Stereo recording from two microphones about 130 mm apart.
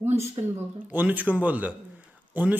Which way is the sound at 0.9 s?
10° right (ahead or behind).